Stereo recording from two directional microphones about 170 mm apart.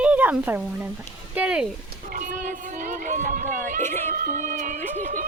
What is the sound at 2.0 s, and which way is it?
Run, 50° right (ahead or behind).